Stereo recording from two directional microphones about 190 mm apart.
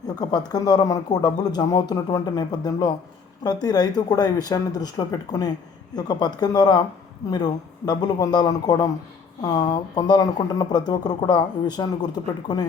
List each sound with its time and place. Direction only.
0.2 s speech: 20° left (ahead or behind)